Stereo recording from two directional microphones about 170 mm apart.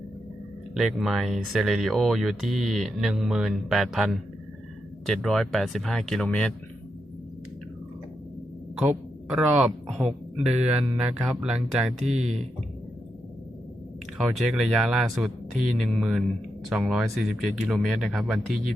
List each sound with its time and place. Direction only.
0.7 s speech: centre (ahead or behind)
9.3 s speech: centre (ahead or behind)
11.9 s speech: 40° right (ahead or behind)
14.3 s speech: centre (ahead or behind)